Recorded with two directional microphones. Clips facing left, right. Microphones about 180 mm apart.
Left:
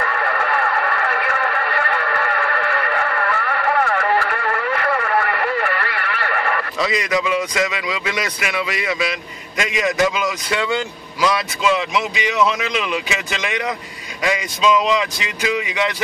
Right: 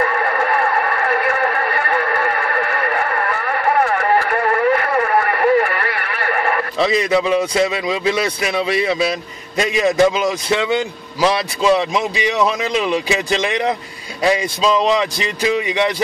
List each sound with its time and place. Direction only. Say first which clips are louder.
0.0 s music: right 4 dB; 40° right (ahead or behind)
6.8 s a man's voice: right 5 dB; 30° right (ahead or behind)